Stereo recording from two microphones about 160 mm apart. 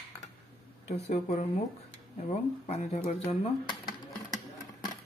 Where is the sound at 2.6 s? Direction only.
45° left (ahead or behind).